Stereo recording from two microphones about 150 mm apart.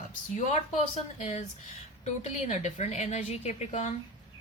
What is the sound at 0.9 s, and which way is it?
A woman's voice, 50° left (ahead or behind).